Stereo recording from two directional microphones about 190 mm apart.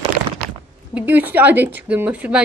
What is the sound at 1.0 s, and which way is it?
Speech, 10° right (ahead or behind).